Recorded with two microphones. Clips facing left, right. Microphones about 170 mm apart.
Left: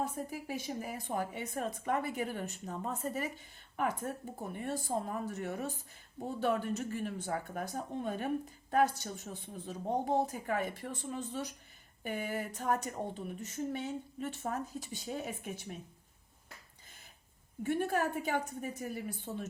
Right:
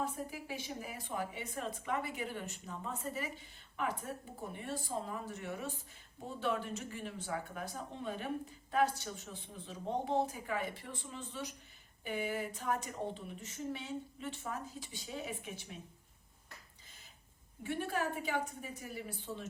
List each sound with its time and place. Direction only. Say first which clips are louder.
0.0 s speech: left 2 dB; 45° left (ahead or behind)
17.6 s speech: left 5 dB; 45° left (ahead or behind)